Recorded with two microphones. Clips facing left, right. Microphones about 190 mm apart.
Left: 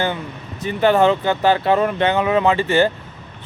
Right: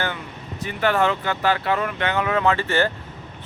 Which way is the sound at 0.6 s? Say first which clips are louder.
Left 6 dB; 20° left (ahead or behind).